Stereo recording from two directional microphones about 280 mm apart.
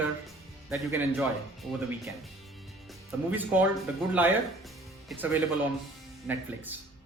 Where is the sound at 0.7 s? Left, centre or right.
Centre.